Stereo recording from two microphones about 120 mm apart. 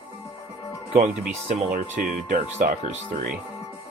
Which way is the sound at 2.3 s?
75° right (ahead or behind).